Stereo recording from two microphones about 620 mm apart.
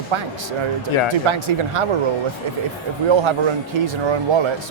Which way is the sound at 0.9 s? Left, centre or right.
Left.